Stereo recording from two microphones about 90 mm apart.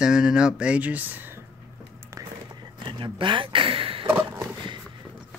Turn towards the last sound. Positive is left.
turn(degrees=-25)  # may be behind; listen again after turning